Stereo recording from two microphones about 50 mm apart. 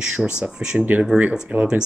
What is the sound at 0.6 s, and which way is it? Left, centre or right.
Speech, right.